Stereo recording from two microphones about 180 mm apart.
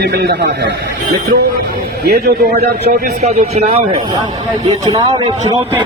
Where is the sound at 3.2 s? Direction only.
35° right (ahead or behind).